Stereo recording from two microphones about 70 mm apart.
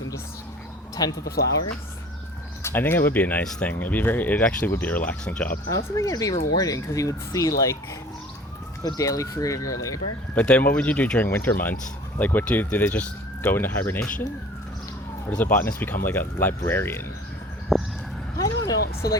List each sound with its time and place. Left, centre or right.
1.0 s speech: left
2.6 s speech: left
3.4 s speech: centre
3.7 s speech: left
5.2 s speech: centre
6.0 s speech: left
8.8 s speech: left
10.3 s speech: centre
11.3 s speech: left
15.3 s speech: centre
15.5 s speech: left
17.7 s a sound: centre
18.3 s vehicle: left
19.0 s speech: left